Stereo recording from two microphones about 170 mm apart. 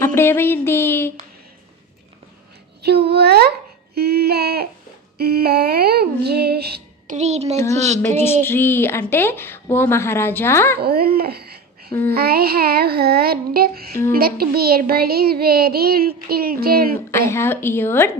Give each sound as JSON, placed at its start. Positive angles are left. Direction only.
{"t": 0.0, "sound": "a woman's voice", "side_deg": 15}
{"t": 3.1, "sound": "speech", "side_deg": -70}
{"t": 3.9, "sound": "female singing", "side_deg": -70}
{"t": 5.1, "sound": "speech", "side_deg": -65}
{"t": 7.1, "sound": "a child's voice", "side_deg": -40}
{"t": 7.5, "sound": "a woman's voice", "side_deg": 15}
{"t": 10.8, "sound": "speech", "side_deg": -65}
{"t": 12.1, "sound": "child singing", "side_deg": -65}
{"t": 17.1, "sound": "a woman's voice", "side_deg": 15}